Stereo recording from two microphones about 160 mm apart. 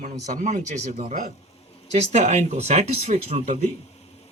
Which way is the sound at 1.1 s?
60° right (ahead or behind).